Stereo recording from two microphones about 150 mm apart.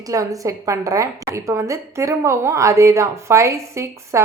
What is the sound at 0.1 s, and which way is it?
A woman's voice, 20° right (ahead or behind).